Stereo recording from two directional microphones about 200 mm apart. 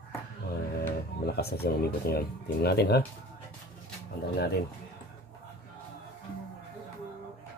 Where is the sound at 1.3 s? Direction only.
50° left (ahead or behind).